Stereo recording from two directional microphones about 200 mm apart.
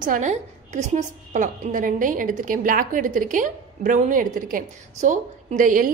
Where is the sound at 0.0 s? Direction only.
40° right (ahead or behind).